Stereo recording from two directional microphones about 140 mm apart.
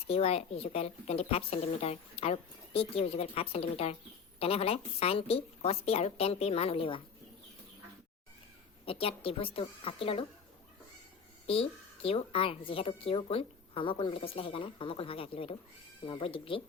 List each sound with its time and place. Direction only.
0.1 s a woman's voice: 45° left (ahead or behind)
8.9 s a woman's voice: 40° left (ahead or behind)
11.4 s a woman's voice: 45° left (ahead or behind)